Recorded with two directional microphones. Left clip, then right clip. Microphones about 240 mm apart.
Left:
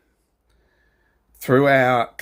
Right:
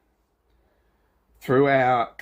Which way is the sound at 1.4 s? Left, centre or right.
Left.